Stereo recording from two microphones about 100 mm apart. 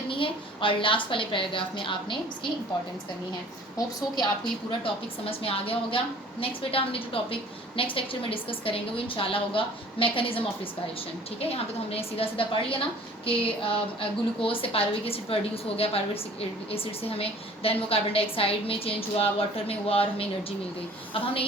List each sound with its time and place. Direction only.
0.1 s a woman's voice: 60° left (ahead or behind)
3.8 s a woman's voice: 45° left (ahead or behind)
4.7 s a woman's voice: 65° left (ahead or behind)
11.3 s a woman's voice: 85° left